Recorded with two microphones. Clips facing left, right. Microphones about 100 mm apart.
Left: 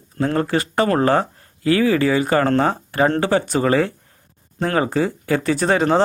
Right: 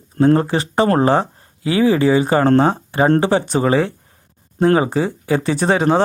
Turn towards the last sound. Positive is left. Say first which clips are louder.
# right 1 dB
turn(degrees=-15)  # may be behind; listen again after turning